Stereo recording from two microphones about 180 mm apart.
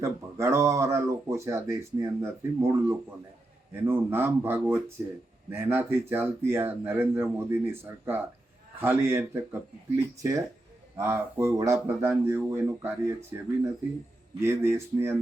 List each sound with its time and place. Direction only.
0.0 s a man's voice: 15° right (ahead or behind)